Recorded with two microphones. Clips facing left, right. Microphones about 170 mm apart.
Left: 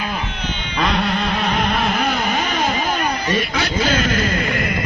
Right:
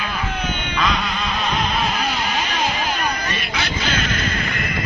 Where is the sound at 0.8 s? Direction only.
60° left (ahead or behind); by 4.1 s 40° left (ahead or behind).